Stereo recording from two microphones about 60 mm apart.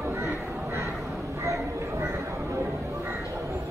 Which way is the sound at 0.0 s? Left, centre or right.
Right.